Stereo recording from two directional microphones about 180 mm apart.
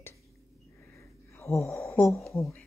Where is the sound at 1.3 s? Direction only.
15° left (ahead or behind).